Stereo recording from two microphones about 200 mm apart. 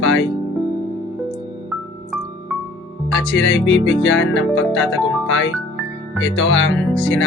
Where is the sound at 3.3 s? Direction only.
70° left (ahead or behind).